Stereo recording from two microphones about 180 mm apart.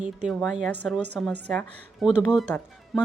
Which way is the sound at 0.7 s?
10° left (ahead or behind).